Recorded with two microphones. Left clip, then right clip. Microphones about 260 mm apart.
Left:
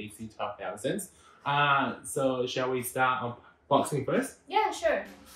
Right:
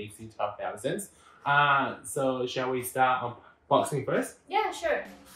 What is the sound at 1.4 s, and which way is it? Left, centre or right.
Speech, centre.